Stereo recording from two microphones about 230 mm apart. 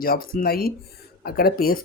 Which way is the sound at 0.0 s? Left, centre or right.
Left.